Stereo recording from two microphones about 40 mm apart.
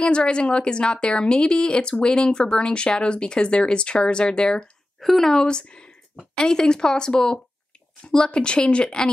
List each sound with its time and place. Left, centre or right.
0.0 s a woman's voice: left
5.0 s a woman's voice: centre; by 9.1 s left